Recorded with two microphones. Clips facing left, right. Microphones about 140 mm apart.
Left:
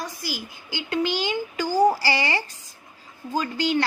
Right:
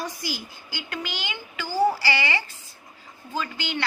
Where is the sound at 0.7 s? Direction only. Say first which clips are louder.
Left 9 dB; 30° left (ahead or behind).